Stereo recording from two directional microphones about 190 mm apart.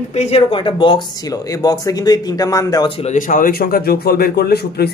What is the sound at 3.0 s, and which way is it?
Speech, 40° left (ahead or behind).